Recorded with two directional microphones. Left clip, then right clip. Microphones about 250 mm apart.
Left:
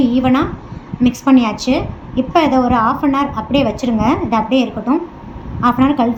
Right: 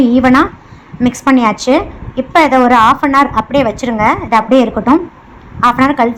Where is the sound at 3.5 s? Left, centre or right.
Centre.